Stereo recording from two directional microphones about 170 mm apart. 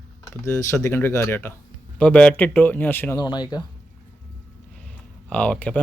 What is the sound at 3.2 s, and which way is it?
Speech, 25° left (ahead or behind).